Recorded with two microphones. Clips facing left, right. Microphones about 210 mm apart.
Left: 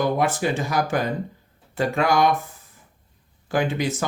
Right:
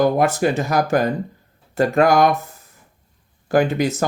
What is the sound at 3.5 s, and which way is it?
Speech, 40° right (ahead or behind).